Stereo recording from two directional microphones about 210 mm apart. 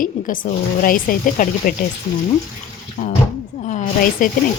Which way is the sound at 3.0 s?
35° left (ahead or behind).